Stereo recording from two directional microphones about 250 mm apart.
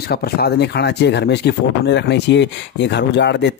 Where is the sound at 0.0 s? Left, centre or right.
Left.